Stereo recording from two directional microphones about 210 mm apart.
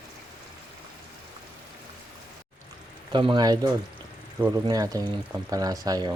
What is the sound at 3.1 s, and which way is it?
Speech, 20° right (ahead or behind).